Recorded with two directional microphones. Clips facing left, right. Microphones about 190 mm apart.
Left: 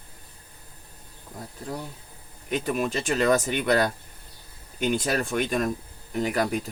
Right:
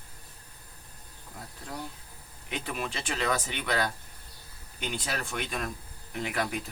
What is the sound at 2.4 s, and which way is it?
Speech, 45° left (ahead or behind).